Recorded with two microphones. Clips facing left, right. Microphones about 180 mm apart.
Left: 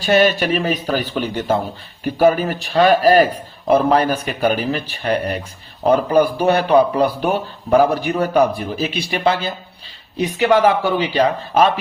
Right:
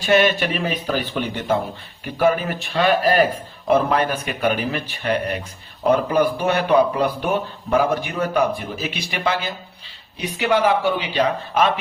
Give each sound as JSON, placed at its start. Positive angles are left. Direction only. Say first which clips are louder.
{"t": 0.0, "sound": "a man's voice", "louder": "left 2 dB", "side_deg": 35}
{"t": 10.2, "sound": "a man's voice", "louder": "left 5 dB", "side_deg": 45}